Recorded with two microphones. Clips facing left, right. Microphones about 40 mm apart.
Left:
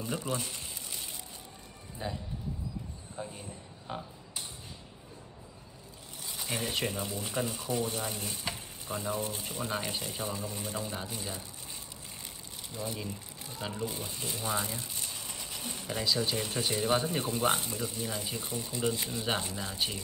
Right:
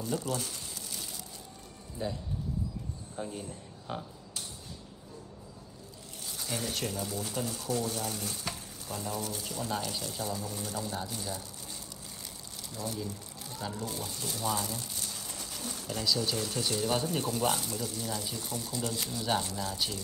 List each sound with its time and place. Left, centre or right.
0.0 s a sound: left
2.0 s speech: centre
6.2 s speech: left
12.6 s speech: left